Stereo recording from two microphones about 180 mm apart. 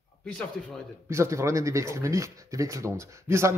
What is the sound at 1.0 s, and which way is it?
A man's voice, 15° right (ahead or behind).